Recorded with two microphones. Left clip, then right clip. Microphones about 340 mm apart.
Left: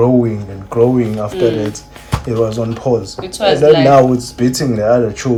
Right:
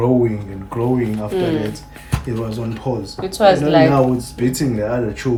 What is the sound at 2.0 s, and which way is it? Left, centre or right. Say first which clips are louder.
Speech: left 9 dB; centre.